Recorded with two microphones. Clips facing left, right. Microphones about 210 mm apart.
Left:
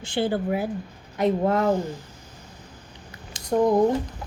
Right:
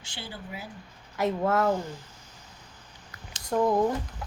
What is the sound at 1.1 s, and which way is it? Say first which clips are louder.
Speech: left 4 dB; 20° left (ahead or behind).